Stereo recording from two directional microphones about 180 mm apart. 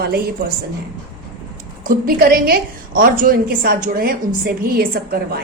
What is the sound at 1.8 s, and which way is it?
A woman's voice, 55° right (ahead or behind).